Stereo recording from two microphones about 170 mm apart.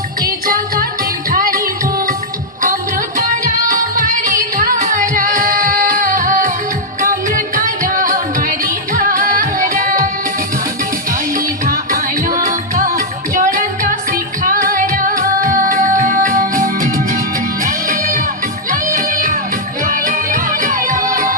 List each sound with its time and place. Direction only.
0.4 s music: 55° right (ahead or behind)
3.2 s music: 50° right (ahead or behind)
11.3 s music: 50° right (ahead or behind)